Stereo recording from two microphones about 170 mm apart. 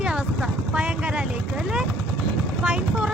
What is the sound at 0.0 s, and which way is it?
Vehicle, 5° right (ahead or behind).